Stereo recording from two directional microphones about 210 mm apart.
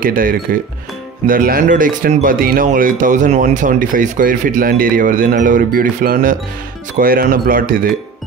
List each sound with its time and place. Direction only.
0.0 s speech: 40° right (ahead or behind)